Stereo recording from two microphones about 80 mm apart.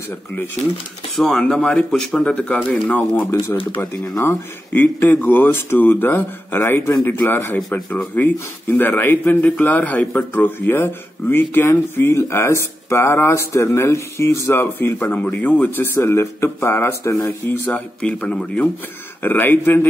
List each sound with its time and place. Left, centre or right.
1.1 s a man's voice: centre; by 17.3 s left
17.6 s a man's voice: centre